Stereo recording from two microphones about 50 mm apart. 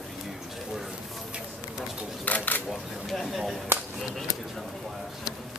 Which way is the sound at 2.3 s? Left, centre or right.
Left.